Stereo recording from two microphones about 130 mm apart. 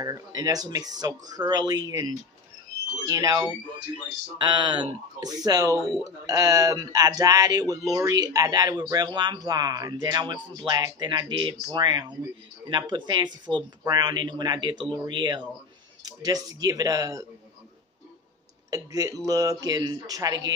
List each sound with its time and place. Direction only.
0.0 s speech: 30° right (ahead or behind)
4.4 s speech: 35° right (ahead or behind)
18.7 s speech: 25° right (ahead or behind)